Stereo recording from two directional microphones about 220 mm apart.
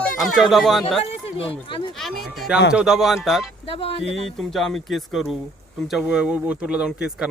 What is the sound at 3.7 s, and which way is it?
Speech, 25° left (ahead or behind).